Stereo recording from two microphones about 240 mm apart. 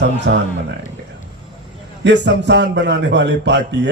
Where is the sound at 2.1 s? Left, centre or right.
Right.